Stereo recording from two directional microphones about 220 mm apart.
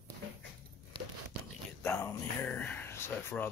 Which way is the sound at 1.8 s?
10° left (ahead or behind).